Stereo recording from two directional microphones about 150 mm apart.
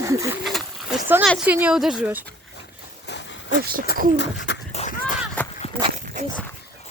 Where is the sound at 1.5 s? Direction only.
10° right (ahead or behind).